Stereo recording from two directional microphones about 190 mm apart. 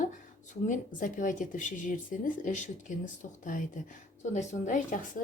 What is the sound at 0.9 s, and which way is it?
Speech, 45° left (ahead or behind).